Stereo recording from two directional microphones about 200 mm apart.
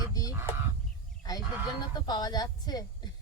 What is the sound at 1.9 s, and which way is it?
Speech, 20° left (ahead or behind).